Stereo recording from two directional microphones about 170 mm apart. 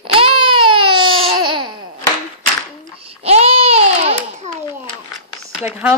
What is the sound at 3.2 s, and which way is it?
Babbling, 35° right (ahead or behind).